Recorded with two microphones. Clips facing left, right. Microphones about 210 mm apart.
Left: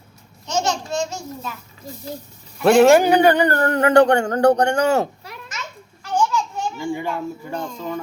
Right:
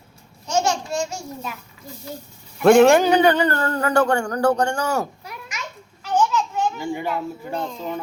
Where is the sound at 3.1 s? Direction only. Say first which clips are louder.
Left 2 dB; 55° left (ahead or behind).